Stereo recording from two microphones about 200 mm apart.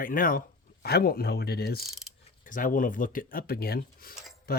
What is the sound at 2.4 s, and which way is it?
Speech, 40° left (ahead or behind).